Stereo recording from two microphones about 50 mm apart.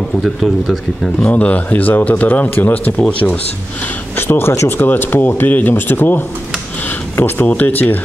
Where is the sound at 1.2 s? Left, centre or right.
Left.